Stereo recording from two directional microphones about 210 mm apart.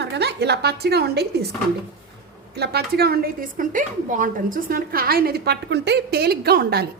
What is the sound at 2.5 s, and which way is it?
A woman's voice, 50° right (ahead or behind).